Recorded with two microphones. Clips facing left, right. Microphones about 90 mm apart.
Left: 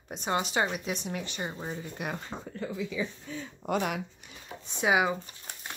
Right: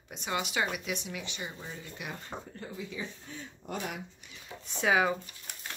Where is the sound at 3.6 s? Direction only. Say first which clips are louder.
Left 8 dB; 75° left (ahead or behind).